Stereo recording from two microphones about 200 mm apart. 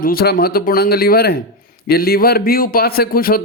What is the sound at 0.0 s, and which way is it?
A man's voice, 50° left (ahead or behind).